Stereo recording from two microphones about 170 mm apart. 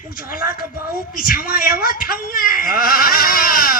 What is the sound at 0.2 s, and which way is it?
A woman's voice, 60° left (ahead or behind).